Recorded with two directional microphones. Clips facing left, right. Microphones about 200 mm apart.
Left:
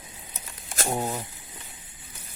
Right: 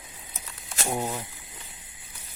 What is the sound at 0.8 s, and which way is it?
Speech, 15° left (ahead or behind).